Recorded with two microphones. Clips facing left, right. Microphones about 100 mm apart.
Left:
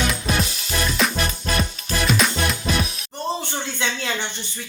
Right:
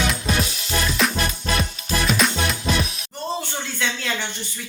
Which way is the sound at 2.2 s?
Centre (ahead or behind).